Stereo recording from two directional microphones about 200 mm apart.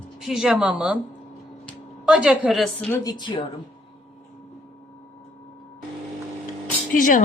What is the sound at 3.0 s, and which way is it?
Speech, 20° left (ahead or behind).